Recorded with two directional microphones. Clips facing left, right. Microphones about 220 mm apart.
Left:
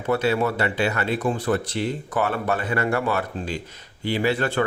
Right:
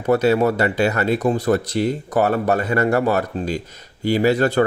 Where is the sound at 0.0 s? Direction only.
40° right (ahead or behind).